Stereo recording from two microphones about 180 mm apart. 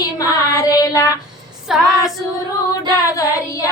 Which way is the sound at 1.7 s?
Centre (ahead or behind).